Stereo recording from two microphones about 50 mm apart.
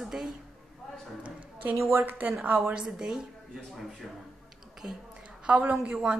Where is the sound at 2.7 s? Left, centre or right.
Centre.